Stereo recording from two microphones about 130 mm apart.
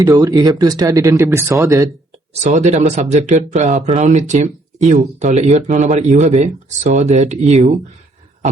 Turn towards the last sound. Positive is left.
turn(degrees=-60)  # may be behind; listen again after turning